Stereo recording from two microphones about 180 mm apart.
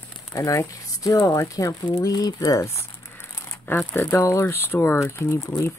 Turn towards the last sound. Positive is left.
turn(degrees=15)  # may be behind; listen again after turning